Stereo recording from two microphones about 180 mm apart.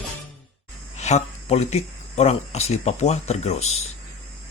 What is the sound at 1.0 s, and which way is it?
Speech, 40° left (ahead or behind).